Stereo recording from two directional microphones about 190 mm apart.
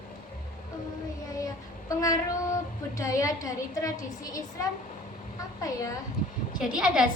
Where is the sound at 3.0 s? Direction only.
15° left (ahead or behind).